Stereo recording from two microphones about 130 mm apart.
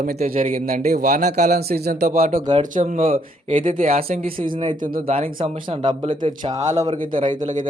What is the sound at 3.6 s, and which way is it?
Speech, 90° right.